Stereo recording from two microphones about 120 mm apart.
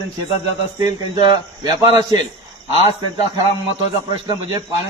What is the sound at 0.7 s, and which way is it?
A man's voice, 35° right (ahead or behind).